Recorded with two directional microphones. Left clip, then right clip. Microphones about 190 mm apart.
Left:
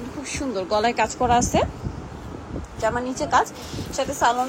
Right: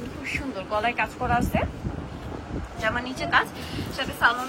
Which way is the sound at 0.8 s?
30° left (ahead or behind).